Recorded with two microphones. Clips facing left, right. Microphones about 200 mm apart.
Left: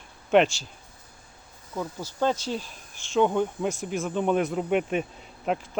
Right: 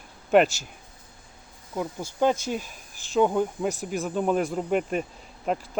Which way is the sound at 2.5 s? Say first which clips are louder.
Right 1 dB; 10° right (ahead or behind).